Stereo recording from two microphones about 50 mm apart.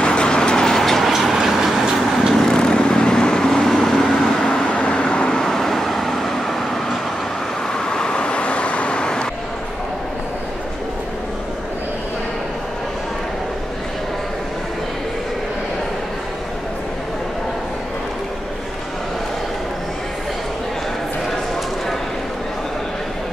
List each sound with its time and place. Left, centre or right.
0.0 s vehicle: centre
2.3 s vehicle: centre
4.5 s vehicle: centre
7.7 s vehicle: centre